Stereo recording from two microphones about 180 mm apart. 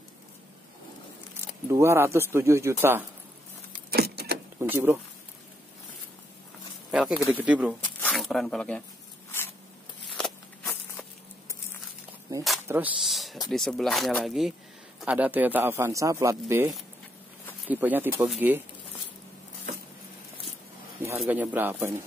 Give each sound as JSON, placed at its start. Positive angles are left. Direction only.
{"t": 1.7, "sound": "speech", "side_deg": -15}
{"t": 3.9, "sound": "a sound", "side_deg": -60}
{"t": 4.6, "sound": "speech", "side_deg": -15}
{"t": 6.9, "sound": "speech", "side_deg": -5}
{"t": 10.2, "sound": "walk", "side_deg": 5}
{"t": 10.6, "sound": "walk", "side_deg": 15}
{"t": 12.1, "sound": "walk", "side_deg": -20}
{"t": 12.6, "sound": "speech", "side_deg": -10}
{"t": 21.0, "sound": "speech", "side_deg": -10}